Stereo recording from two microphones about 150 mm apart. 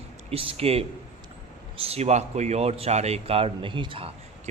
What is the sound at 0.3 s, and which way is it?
A man's voice, 40° right (ahead or behind).